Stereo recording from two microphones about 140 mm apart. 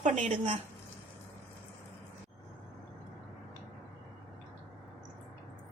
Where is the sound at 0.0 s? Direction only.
55° right (ahead or behind).